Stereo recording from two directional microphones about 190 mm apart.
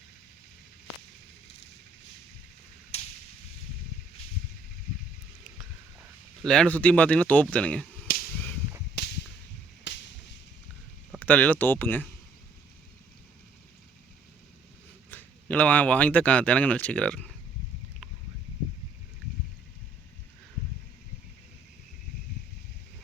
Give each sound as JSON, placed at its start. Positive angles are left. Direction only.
{"t": 2.9, "sound": "whip", "side_deg": 35}
{"t": 6.4, "sound": "speech", "side_deg": 5}
{"t": 8.1, "sound": "whip", "side_deg": 50}
{"t": 9.0, "sound": "whip", "side_deg": 60}
{"t": 11.2, "sound": "speech", "side_deg": 10}
{"t": 15.1, "sound": "speech", "side_deg": 5}